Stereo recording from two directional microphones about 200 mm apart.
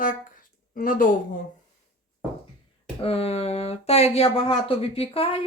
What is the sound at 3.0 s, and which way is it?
Speech, 30° left (ahead or behind).